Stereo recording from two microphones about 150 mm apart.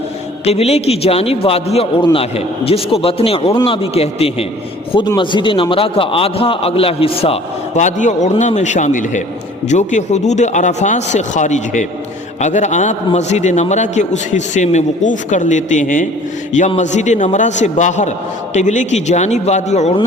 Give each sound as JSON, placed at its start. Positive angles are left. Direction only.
{"t": 0.4, "sound": "a man's voice", "side_deg": 45}
{"t": 4.9, "sound": "a man's voice", "side_deg": 30}
{"t": 7.8, "sound": "a man's voice", "side_deg": 55}